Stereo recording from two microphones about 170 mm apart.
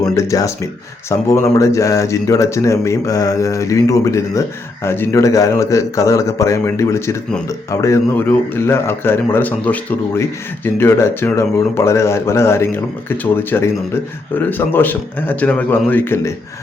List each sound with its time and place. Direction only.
0.2 s speech: 20° left (ahead or behind)